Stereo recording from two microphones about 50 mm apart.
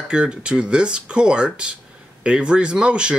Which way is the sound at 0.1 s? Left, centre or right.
Centre.